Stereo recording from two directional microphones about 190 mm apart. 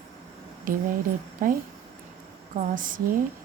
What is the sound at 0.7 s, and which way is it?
Speech, 45° right (ahead or behind).